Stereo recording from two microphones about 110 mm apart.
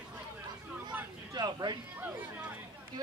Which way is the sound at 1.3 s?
40° right (ahead or behind).